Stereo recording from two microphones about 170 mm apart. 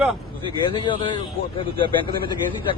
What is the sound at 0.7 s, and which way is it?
Speech, 30° left (ahead or behind).